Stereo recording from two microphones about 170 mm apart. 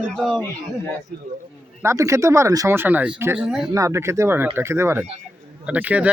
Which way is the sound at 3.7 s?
15° right (ahead or behind).